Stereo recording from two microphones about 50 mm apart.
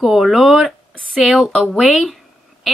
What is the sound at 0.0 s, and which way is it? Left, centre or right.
Speech, centre.